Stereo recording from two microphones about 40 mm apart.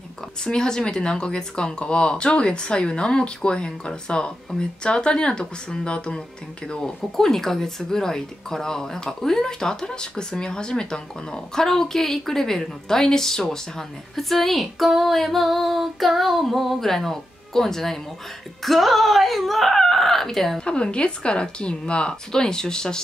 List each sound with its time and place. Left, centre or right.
0.4 s speech: centre
7.2 s speech: centre
15.1 s female singing: centre
18.6 s speech: centre
20.6 s speech: left